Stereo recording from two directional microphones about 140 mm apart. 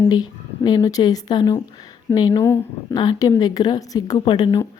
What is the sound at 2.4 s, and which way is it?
A woman's voice, 20° left (ahead or behind).